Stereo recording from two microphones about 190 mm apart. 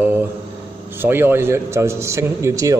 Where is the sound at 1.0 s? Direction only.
10° right (ahead or behind).